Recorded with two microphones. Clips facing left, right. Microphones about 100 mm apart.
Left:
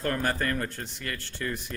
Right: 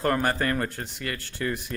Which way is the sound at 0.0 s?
60° right (ahead or behind).